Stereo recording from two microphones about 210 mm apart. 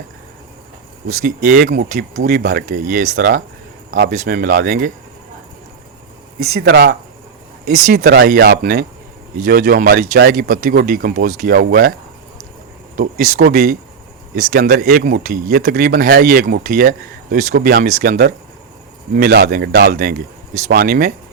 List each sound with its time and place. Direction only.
1.2 s speech: 40° right (ahead or behind)
6.4 s speech: 50° right (ahead or behind)
13.0 s speech: 45° right (ahead or behind)